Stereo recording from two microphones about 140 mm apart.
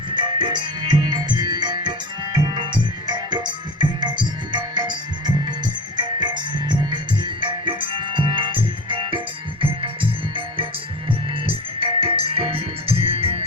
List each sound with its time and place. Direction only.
0.1 s music: 35° right (ahead or behind)